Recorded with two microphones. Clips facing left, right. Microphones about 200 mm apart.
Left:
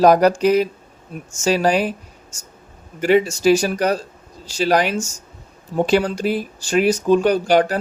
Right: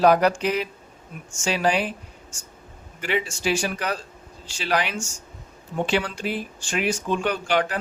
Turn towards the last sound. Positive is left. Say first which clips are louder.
# left 8 dB
turn(degrees=40)  # may be behind; listen again after turning